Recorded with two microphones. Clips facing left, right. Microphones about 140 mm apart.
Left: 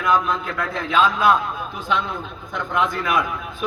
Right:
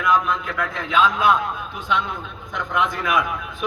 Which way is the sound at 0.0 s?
30° left (ahead or behind).